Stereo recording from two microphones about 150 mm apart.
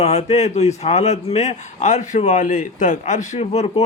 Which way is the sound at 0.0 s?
45° left (ahead or behind).